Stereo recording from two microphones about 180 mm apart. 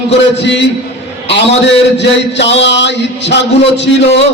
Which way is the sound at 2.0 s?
75° left (ahead or behind).